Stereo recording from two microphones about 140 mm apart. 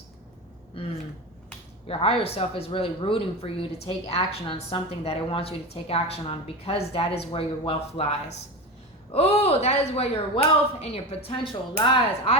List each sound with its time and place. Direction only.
1.9 s speech: 40° left (ahead or behind)
9.1 s speech: 45° left (ahead or behind)